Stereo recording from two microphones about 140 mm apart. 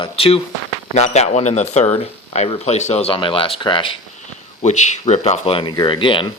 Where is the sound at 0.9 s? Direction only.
50° left (ahead or behind); by 3.9 s 35° left (ahead or behind).